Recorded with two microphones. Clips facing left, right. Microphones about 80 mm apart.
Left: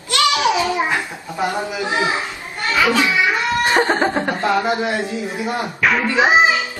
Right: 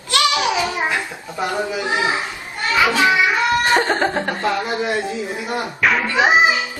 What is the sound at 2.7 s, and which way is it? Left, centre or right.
Children playing, right.